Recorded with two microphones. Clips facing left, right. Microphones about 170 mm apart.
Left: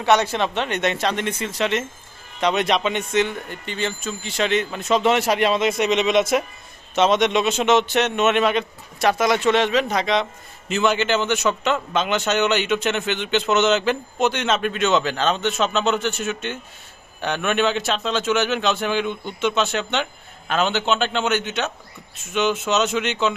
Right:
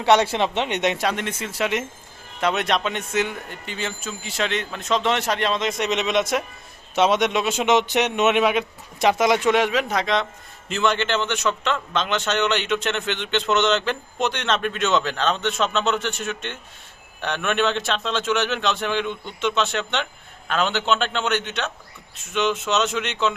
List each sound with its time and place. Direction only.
0.0 s speech: 25° right (ahead or behind)
1.1 s a man's voice: 5° right (ahead or behind)
6.9 s a man's voice: 10° right (ahead or behind)